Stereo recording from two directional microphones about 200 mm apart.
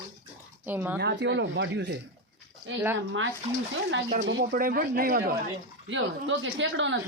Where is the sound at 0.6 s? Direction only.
10° right (ahead or behind).